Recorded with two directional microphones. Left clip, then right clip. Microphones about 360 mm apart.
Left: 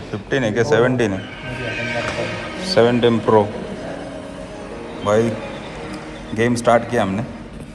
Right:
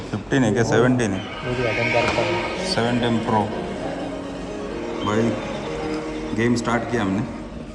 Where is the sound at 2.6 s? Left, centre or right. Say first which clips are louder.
Left 10 dB; centre.